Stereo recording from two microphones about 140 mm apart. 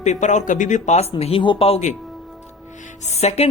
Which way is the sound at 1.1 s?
40° left (ahead or behind).